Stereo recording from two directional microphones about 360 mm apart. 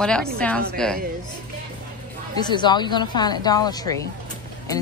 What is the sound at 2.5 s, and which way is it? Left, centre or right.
Speech, centre.